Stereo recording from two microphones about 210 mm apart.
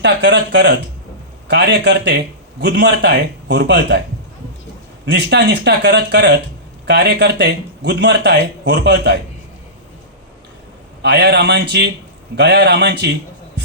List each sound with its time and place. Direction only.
0.0 s a man's voice: 55° right (ahead or behind)
5.0 s a man's voice: 55° right (ahead or behind)
11.0 s speech: 55° right (ahead or behind)